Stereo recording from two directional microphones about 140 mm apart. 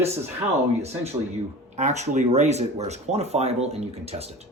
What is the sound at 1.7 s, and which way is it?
A man's voice, 55° right (ahead or behind).